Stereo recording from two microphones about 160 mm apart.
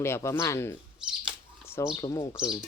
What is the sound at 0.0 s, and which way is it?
Speech, 15° left (ahead or behind).